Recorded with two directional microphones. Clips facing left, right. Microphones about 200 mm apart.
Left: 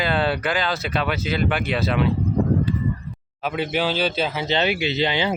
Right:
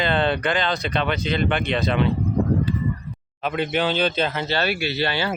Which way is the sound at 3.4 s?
5° left (ahead or behind).